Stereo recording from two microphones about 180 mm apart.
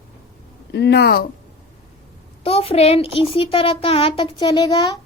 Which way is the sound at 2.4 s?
35° left (ahead or behind).